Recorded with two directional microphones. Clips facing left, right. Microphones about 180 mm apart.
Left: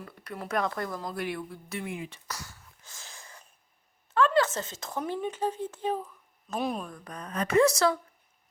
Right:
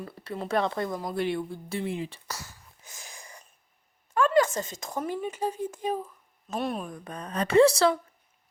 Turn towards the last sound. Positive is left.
turn(degrees=-30)  # may be behind; listen again after turning